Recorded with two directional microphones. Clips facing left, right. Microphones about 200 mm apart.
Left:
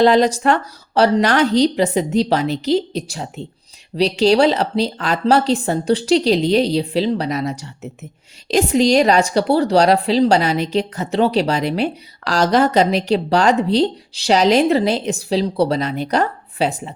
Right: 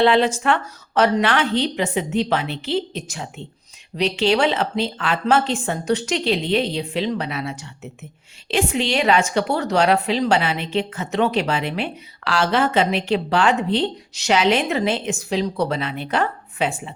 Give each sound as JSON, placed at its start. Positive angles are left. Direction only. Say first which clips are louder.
{"t": 0.0, "sound": "a woman's voice", "louder": "left 4 dB", "side_deg": 40}